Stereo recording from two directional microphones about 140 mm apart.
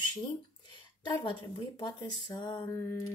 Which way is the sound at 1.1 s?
35° left (ahead or behind).